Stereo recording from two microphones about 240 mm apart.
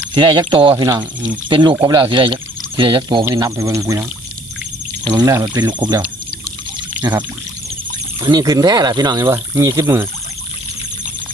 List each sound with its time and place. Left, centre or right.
0.1 s speech: centre
1.7 s speech: centre
2.0 s speech: centre
5.0 s speech: centre
8.2 s speech: centre